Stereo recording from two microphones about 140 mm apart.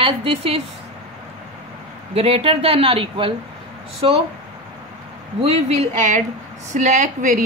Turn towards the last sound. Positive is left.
turn(degrees=-60)  # may be behind; listen again after turning